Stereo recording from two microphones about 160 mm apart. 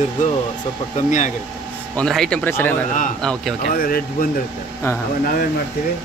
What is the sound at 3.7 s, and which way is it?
Speech, 65° left (ahead or behind).